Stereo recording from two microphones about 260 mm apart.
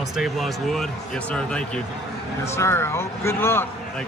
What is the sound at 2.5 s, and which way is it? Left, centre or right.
Speech, centre.